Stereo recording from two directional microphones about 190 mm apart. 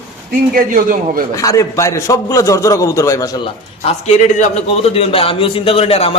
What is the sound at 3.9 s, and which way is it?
A man's voice, 35° left (ahead or behind).